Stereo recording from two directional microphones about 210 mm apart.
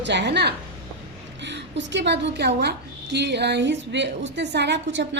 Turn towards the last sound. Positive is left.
turn(degrees=-55)  # may be behind; listen again after turning